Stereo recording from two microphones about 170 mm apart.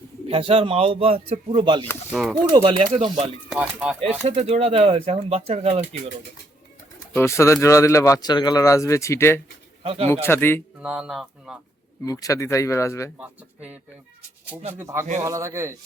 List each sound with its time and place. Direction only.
0.3 s speech: 35° right (ahead or behind)
3.5 s speech: 5° right (ahead or behind)
4.3 s speech: 40° right (ahead or behind)
7.1 s speech: 15° left (ahead or behind)
9.8 s a man's voice: 35° right (ahead or behind)
10.2 s speech: 15° left (ahead or behind)
10.8 s speech: 5° right (ahead or behind)
12.0 s speech: 20° left (ahead or behind)
13.1 s speech: 10° right (ahead or behind)